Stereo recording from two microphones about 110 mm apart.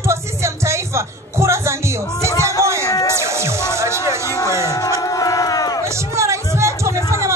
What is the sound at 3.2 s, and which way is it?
Music, 25° right (ahead or behind).